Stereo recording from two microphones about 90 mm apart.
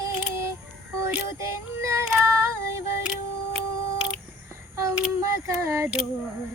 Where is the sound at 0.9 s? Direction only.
30° right (ahead or behind).